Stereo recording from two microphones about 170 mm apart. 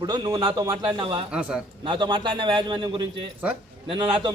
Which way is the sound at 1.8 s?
25° right (ahead or behind).